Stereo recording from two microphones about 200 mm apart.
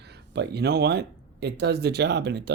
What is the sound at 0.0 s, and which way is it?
Speech, 55° right (ahead or behind).